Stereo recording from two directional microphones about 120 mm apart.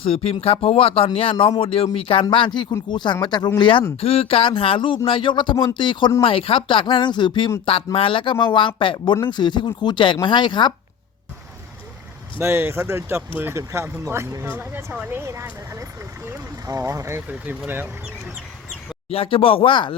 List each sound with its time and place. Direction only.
0.0 s speech: 55° left (ahead or behind)
2.9 s speech: 40° left (ahead or behind)
4.0 s speech: 55° left (ahead or behind)
12.4 s speech: 20° right (ahead or behind)
19.1 s speech: 50° left (ahead or behind)